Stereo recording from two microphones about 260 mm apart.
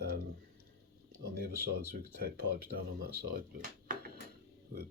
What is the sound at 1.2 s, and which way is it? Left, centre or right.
Speech, right.